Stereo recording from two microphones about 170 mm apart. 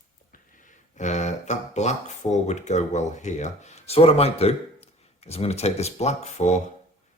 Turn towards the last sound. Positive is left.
turn(degrees=40)  # may be behind; listen again after turning